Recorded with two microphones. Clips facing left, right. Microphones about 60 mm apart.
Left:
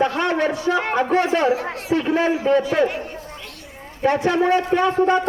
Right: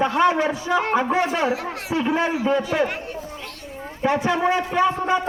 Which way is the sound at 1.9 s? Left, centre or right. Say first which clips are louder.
Left 2 dB; centre.